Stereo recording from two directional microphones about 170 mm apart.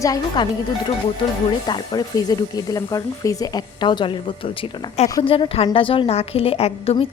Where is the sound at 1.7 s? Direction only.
25° left (ahead or behind).